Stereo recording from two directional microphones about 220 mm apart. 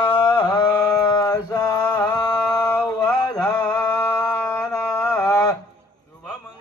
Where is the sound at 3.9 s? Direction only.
20° left (ahead or behind).